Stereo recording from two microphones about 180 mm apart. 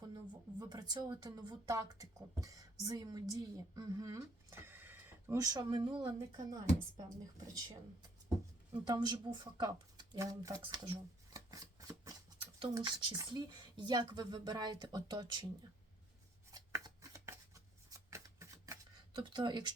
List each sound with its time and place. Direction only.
0.6 s speech: 20° right (ahead or behind)
10.6 s a sound: 25° right (ahead or behind)
12.5 s speech: 25° right (ahead or behind)
16.5 s shuffling cards: 20° right (ahead or behind)